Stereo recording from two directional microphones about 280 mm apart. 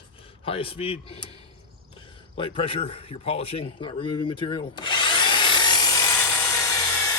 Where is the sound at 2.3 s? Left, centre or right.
Centre.